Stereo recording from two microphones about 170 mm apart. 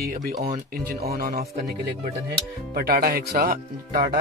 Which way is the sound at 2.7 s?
60° right (ahead or behind).